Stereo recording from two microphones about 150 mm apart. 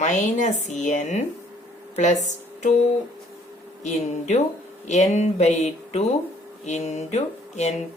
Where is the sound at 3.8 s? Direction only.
50° left (ahead or behind).